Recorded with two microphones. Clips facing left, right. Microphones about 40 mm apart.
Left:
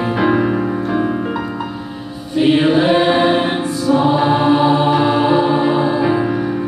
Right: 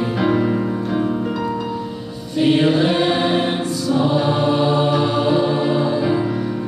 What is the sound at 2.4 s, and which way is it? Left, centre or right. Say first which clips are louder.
Choir: left 3 dB; centre.